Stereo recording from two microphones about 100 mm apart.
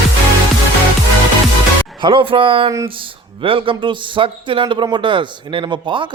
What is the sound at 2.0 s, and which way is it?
A man's voice, 55° right (ahead or behind).